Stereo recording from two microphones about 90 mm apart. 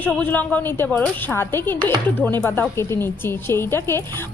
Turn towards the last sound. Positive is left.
turn(degrees=30)  # may be behind; listen again after turning